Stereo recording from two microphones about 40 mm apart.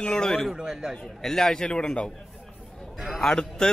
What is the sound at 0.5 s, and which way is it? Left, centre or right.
Speech, centre.